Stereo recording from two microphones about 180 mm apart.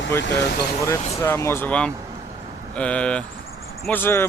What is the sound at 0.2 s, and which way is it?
Speech, 65° left (ahead or behind).